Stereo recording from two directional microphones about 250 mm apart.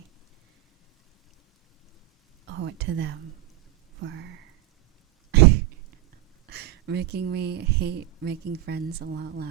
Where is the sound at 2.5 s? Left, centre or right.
Right.